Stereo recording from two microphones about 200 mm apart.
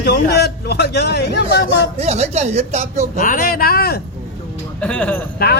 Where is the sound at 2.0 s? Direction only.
35° right (ahead or behind).